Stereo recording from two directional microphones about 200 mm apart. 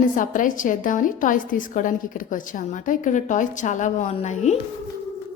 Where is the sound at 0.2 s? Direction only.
40° left (ahead or behind).